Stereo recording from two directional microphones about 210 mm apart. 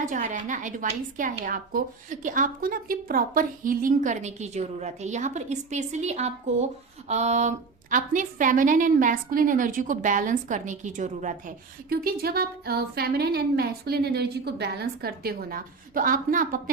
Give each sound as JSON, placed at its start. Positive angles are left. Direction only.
{"t": 0.1, "sound": "a woman's voice", "side_deg": -35}